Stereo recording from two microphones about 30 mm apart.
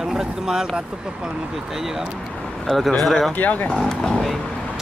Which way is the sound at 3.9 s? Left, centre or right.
Centre.